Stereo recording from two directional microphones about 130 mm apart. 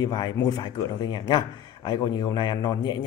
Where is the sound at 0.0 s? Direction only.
30° left (ahead or behind).